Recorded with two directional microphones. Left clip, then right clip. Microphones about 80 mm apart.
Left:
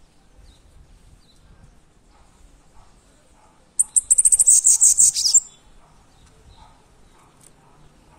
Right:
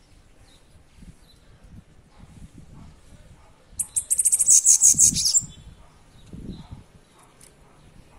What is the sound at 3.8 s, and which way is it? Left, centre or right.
Bird, left.